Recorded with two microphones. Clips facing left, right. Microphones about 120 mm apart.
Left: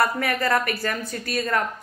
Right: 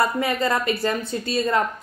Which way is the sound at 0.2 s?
20° right (ahead or behind).